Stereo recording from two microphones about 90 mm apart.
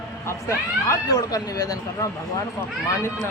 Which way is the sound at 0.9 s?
45° left (ahead or behind).